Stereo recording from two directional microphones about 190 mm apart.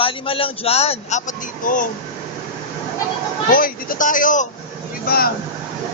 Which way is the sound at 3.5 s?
45° left (ahead or behind).